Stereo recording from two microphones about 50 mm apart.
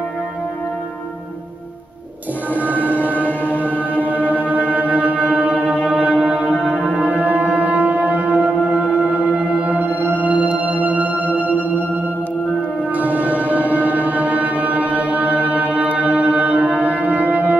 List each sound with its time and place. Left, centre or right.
3.0 s music: left
4.0 s music: right
5.9 s singing bowl: right
6.6 s music: centre
7.0 s a sound: right
8.9 s singing bowl: right
12.9 s music: right